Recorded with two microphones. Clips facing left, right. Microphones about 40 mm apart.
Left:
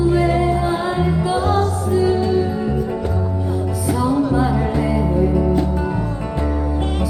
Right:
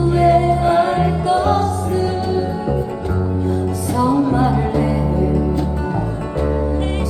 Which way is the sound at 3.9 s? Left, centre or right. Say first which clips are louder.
Right 2 dB; centre.